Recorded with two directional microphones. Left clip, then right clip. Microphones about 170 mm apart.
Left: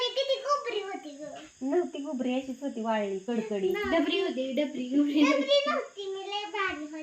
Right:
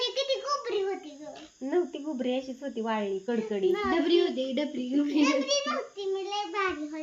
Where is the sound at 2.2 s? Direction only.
10° left (ahead or behind).